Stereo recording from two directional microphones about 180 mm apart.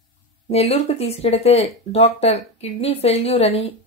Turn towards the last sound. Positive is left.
turn(degrees=35)  # may be behind; listen again after turning